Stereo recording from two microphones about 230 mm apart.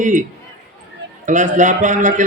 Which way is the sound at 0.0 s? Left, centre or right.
Right.